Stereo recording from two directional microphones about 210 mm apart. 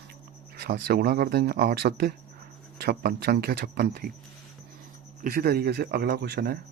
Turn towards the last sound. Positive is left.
turn(degrees=-50)  # may be behind; listen again after turning